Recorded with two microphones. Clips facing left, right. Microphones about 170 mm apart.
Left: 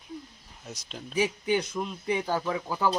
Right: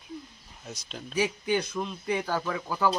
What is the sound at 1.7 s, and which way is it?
Speech, 5° left (ahead or behind).